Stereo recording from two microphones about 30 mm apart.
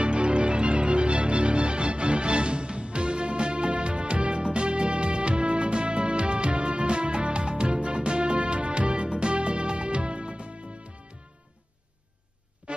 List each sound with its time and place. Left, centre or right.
0.0 s music: right
12.7 s music: right